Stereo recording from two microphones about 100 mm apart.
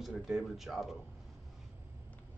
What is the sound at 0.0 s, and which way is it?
Speech, centre (ahead or behind).